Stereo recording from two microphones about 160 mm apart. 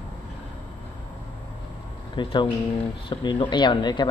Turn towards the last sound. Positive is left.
turn(degrees=25)  # may be behind; listen again after turning